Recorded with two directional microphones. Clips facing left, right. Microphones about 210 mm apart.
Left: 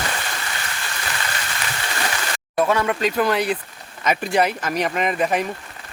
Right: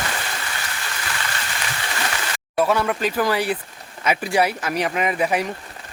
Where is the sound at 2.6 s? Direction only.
5° right (ahead or behind).